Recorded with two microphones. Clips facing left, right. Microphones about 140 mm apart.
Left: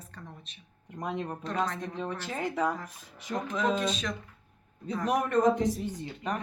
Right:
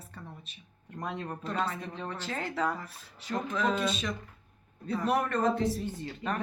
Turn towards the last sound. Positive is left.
turn(degrees=15)  # may be behind; listen again after turning